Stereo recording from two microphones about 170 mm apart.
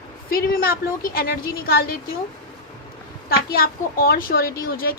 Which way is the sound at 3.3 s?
60° left (ahead or behind).